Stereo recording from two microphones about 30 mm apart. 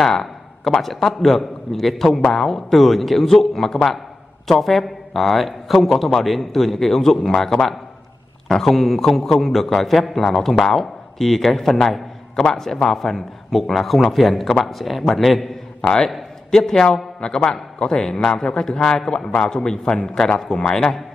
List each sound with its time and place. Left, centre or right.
0.0 s a man's voice: centre
8.5 s a man's voice: centre
12.4 s a man's voice: centre
15.8 s a man's voice: left
17.2 s a man's voice: left
17.9 s a man's voice: centre